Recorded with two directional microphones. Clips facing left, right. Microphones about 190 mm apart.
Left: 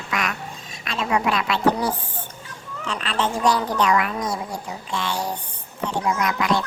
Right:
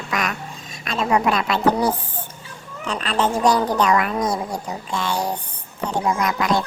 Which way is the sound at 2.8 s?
40° right (ahead or behind).